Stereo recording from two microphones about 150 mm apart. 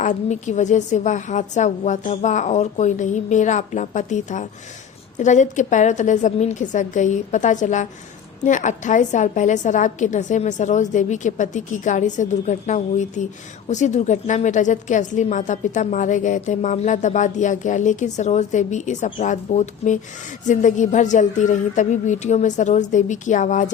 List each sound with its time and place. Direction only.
0.0 s a woman's voice: 55° left (ahead or behind)